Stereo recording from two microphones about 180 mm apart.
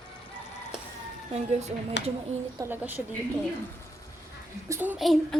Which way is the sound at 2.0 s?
75° left (ahead or behind).